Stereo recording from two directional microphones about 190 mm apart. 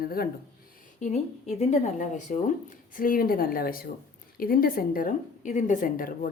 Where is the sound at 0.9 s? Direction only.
35° left (ahead or behind).